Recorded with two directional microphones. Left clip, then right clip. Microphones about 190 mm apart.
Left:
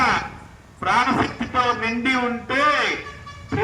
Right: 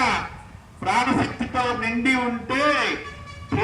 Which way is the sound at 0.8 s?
50° right (ahead or behind).